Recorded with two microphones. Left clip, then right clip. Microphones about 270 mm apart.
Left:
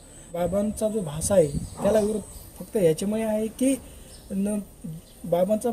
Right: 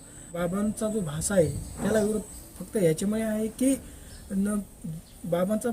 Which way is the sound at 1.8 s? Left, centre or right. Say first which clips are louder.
Left 7 dB; left.